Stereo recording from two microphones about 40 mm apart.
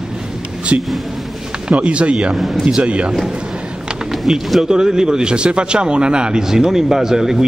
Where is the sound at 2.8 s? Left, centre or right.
Right.